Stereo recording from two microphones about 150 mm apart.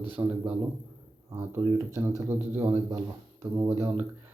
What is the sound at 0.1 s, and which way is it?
A man's voice, 10° right (ahead or behind).